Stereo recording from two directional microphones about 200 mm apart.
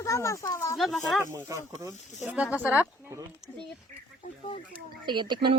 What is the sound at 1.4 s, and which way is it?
Speech, 15° right (ahead or behind).